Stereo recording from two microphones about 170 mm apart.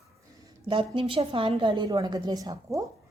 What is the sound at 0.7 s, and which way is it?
A woman's voice, 30° right (ahead or behind).